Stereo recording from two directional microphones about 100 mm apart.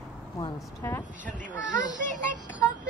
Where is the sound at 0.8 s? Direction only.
25° left (ahead or behind).